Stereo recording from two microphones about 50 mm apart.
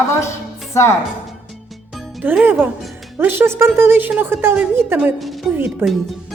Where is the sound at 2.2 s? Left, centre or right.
Right.